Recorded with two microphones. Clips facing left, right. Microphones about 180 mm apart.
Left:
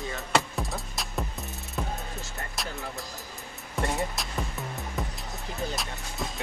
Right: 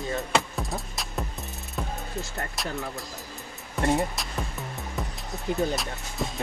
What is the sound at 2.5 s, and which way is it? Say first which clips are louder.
Speech: right 2 dB; centre (ahead or behind).